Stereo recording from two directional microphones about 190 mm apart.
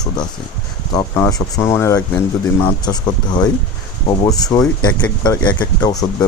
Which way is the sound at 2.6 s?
25° left (ahead or behind).